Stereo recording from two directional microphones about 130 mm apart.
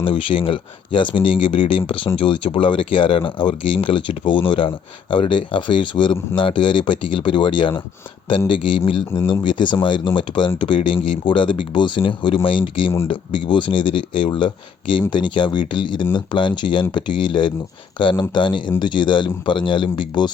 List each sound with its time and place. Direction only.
0.0 s speech: 40° left (ahead or behind)